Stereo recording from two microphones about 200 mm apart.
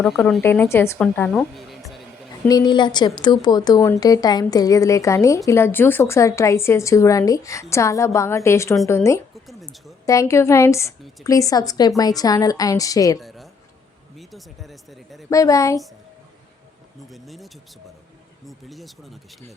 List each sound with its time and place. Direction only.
0.0 s a woman's voice: centre (ahead or behind)
2.5 s a woman's voice: 20° left (ahead or behind)
9.3 s a sound: centre (ahead or behind)
10.1 s a woman's voice: 15° left (ahead or behind)
13.1 s a sound: centre (ahead or behind)
14.2 s speech: centre (ahead or behind)
15.3 s a woman's voice: 15° left (ahead or behind)
17.1 s a woman's voice: centre (ahead or behind)